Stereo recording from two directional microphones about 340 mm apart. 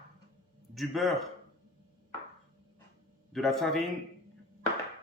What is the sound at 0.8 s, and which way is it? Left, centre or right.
Speech, centre.